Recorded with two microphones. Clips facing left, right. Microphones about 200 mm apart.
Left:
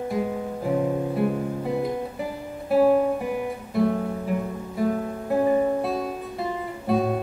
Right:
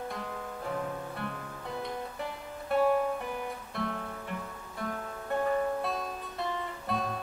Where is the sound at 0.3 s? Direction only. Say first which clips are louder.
Left 11 dB; 20° left (ahead or behind).